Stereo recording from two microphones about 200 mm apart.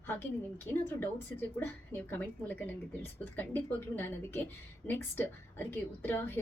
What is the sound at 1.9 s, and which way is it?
A woman's voice, 10° left (ahead or behind).